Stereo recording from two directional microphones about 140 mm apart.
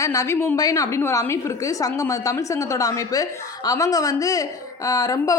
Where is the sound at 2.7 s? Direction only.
25° left (ahead or behind).